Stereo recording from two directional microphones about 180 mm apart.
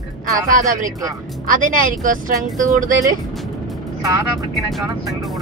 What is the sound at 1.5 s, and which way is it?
Speech, 50° right (ahead or behind).